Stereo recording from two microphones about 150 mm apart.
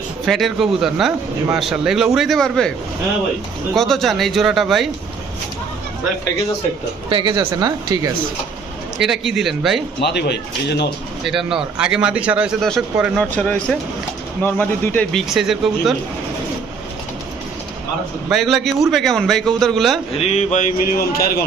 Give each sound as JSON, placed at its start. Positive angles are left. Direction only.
{"t": 0.3, "sound": "a man's voice", "side_deg": 0}
{"t": 3.8, "sound": "a man's voice", "side_deg": 0}
{"t": 7.1, "sound": "speech", "side_deg": -30}
{"t": 9.0, "sound": "a man's voice", "side_deg": -5}
{"t": 10.0, "sound": "speech", "side_deg": 90}
{"t": 11.3, "sound": "a man's voice", "side_deg": -5}
{"t": 13.3, "sound": "a man's voice", "side_deg": 5}
{"t": 18.3, "sound": "a man's voice", "side_deg": 0}
{"t": 20.1, "sound": "mantra", "side_deg": 45}
{"t": 20.9, "sound": "speech", "side_deg": 90}